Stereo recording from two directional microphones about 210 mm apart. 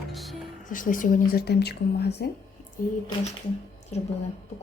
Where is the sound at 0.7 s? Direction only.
40° left (ahead or behind).